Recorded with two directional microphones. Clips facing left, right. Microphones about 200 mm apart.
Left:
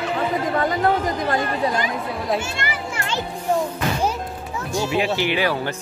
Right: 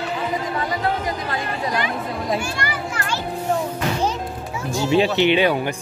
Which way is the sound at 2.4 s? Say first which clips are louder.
Right 1 dB; 25° left (ahead or behind).